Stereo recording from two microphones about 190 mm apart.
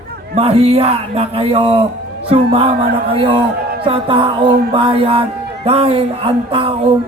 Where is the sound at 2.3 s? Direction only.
30° right (ahead or behind).